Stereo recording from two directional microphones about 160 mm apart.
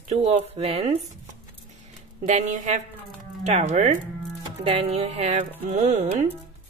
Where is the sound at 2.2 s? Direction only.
50° right (ahead or behind).